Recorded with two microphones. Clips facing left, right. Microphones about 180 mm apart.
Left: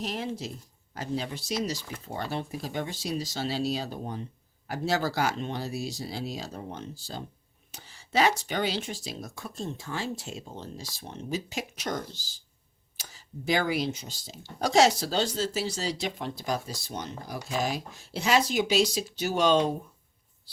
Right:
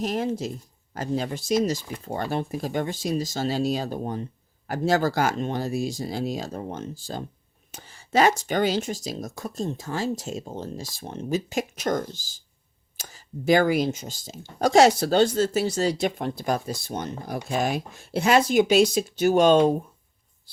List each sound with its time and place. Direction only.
0.0 s speech: 45° right (ahead or behind)